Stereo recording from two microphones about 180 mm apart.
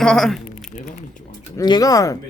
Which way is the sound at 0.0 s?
5° left (ahead or behind).